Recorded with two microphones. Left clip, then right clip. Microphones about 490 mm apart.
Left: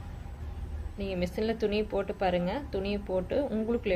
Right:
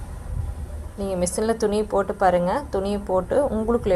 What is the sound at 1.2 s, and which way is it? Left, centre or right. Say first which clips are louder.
A woman's voice: right 8 dB; left.